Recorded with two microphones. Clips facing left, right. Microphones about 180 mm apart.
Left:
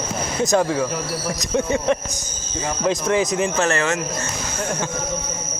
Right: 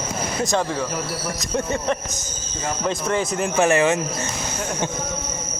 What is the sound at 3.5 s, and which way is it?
Speech, 15° right (ahead or behind).